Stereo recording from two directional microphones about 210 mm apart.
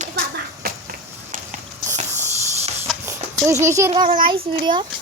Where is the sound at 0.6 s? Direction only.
45° right (ahead or behind).